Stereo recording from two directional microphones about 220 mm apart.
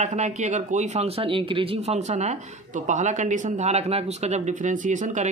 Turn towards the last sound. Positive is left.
turn(degrees=-35)  # may be behind; listen again after turning